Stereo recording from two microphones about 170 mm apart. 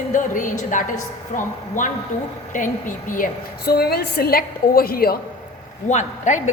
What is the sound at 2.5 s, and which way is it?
A woman's voice, 50° left (ahead or behind).